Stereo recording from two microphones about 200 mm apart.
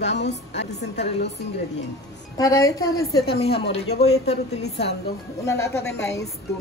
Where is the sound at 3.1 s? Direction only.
55° left (ahead or behind).